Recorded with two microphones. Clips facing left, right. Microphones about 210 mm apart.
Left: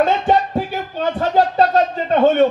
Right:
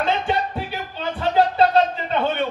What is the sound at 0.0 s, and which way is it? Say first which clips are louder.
Music: left 6 dB; 45° left (ahead or behind).